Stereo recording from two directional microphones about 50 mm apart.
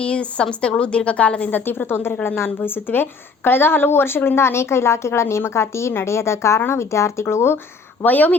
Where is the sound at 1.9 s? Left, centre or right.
Left.